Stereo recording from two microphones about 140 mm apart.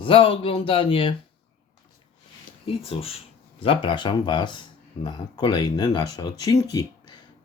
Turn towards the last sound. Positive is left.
turn(degrees=25)  # may be behind; listen again after turning